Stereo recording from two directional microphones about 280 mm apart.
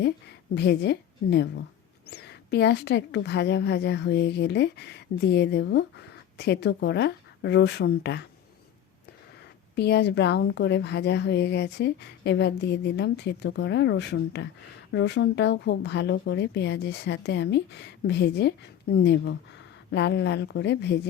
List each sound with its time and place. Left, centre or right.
0.5 s speech: left
9.7 s speech: left